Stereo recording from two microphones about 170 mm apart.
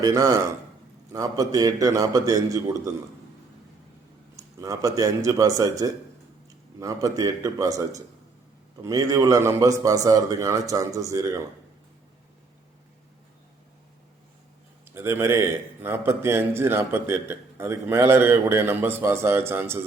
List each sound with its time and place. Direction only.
0.0 s a man's voice: 20° right (ahead or behind)
4.6 s a man's voice: 20° right (ahead or behind)
14.9 s a man's voice: 15° right (ahead or behind)